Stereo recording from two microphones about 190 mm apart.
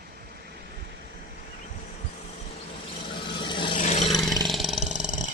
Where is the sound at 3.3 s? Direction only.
25° left (ahead or behind).